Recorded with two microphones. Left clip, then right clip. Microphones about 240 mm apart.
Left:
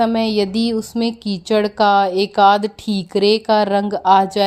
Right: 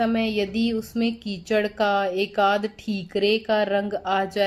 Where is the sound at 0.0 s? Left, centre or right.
Left.